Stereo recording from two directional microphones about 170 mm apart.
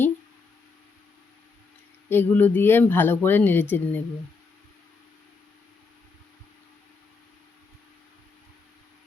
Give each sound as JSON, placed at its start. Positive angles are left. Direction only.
{"t": 2.0, "sound": "speech", "side_deg": 10}